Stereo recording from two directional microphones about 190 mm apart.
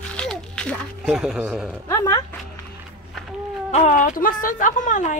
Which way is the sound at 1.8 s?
15° left (ahead or behind).